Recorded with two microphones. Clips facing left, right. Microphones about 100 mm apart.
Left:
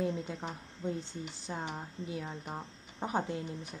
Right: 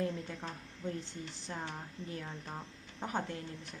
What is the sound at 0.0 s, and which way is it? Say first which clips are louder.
A woman's voice: left 3 dB; 15° left (ahead or behind).